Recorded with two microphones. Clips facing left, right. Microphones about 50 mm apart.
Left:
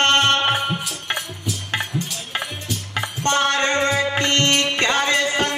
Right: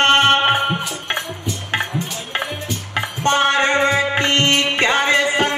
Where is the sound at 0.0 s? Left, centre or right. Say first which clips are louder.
Right 3 dB; centre.